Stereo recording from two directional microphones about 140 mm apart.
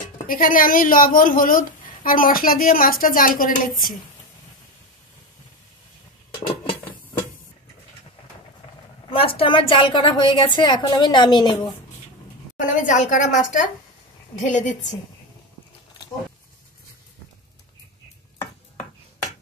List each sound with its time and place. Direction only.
0.3 s a woman's voice: 80° left
6.3 s a sound: 35° left (ahead or behind)
9.1 s a woman's voice: 40° left (ahead or behind)
12.5 s a woman's voice: 60° left (ahead or behind)